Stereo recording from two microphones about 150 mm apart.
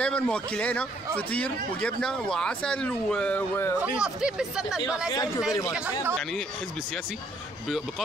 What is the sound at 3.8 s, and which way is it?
Speech, 5° right (ahead or behind).